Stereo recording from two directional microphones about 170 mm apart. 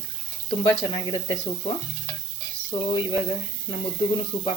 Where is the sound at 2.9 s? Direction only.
30° left (ahead or behind).